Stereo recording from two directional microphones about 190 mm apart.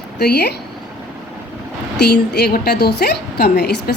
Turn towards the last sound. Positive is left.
turn(degrees=60)  # may be behind; listen again after turning